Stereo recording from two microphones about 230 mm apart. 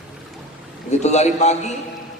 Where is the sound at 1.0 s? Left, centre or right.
Left.